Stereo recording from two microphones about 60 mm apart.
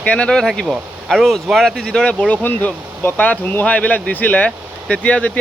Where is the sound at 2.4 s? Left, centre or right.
Left.